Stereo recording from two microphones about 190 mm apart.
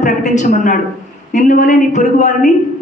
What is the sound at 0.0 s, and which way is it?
A woman's voice, 40° left (ahead or behind).